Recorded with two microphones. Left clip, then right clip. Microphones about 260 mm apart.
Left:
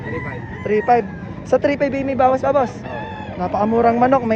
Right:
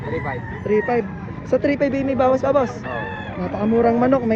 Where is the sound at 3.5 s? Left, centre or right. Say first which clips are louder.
Left 3 dB; left.